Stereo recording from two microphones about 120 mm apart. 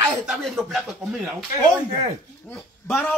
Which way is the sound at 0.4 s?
5° left (ahead or behind).